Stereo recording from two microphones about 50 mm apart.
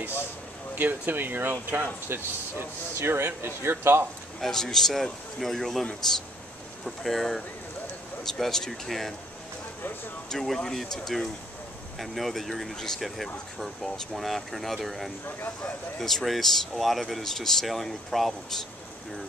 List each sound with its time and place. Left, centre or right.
0.7 s speech: right
4.4 s speech: centre
10.3 s speech: centre
15.2 s speech: left
16.0 s speech: centre